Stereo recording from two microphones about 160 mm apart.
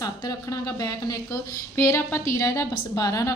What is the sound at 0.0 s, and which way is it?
Speech, 25° left (ahead or behind).